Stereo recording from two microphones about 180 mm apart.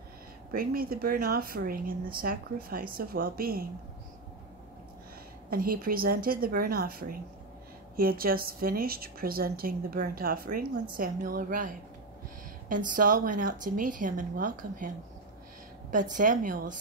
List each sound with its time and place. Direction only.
0.5 s a woman's voice: 55° right (ahead or behind)
5.5 s a woman's voice: 55° right (ahead or behind)
15.9 s speech: 45° right (ahead or behind)